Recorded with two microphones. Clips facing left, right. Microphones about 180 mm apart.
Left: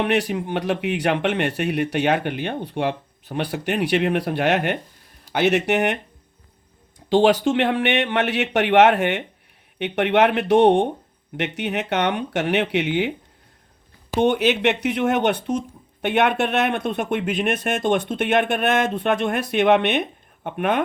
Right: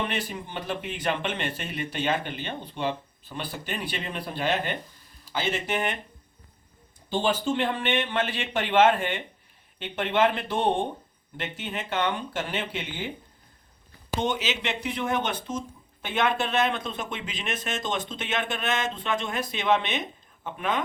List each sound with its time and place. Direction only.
0.0 s speech: 75° left (ahead or behind)
7.1 s speech: 90° left; by 13.1 s 75° left (ahead or behind)
14.2 s speech: 60° left (ahead or behind)